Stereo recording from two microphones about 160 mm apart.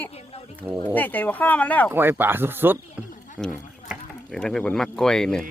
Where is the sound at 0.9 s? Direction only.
10° left (ahead or behind).